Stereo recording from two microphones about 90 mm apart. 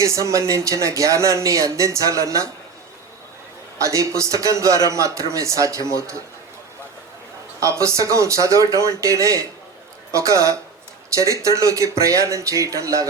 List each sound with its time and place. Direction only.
0.0 s speech: 35° right (ahead or behind)
3.8 s speech: 35° right (ahead or behind)
7.6 s speech: 35° right (ahead or behind)